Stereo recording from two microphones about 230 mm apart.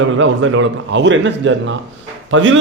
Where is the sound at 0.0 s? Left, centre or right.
Right.